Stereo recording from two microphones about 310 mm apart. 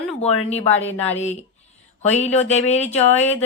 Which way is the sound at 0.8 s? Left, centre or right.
Centre.